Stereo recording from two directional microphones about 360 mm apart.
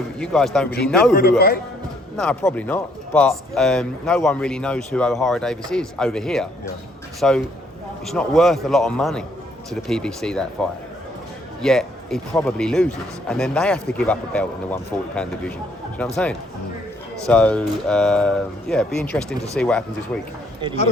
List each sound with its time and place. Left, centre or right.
0.2 s speech: centre
1.1 s a man's voice: left
2.1 s speech: centre
11.6 s speech: centre